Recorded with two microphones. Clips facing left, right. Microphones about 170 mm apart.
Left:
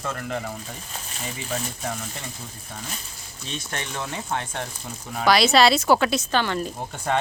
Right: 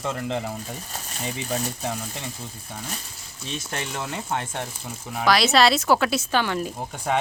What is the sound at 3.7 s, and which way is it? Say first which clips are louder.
Speech: even; 5° right (ahead or behind).